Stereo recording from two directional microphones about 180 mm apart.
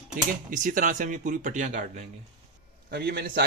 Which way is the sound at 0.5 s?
45° right (ahead or behind).